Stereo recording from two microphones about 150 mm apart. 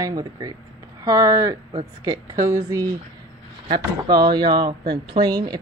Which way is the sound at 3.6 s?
30° right (ahead or behind).